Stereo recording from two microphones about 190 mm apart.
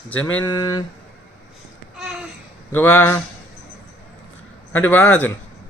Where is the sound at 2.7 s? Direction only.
10° left (ahead or behind).